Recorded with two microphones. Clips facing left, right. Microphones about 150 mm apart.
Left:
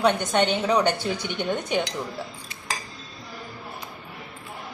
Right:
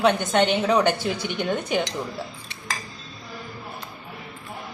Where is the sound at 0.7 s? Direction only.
10° right (ahead or behind).